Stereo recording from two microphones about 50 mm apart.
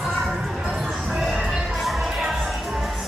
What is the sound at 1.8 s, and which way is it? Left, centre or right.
Music, centre.